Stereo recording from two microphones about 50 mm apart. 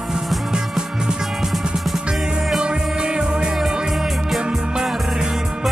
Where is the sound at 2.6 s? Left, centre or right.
Centre.